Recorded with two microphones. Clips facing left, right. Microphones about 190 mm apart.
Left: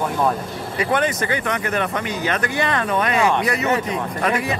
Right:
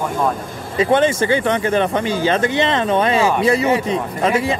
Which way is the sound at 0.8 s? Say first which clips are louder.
Right 6 dB; 25° right (ahead or behind).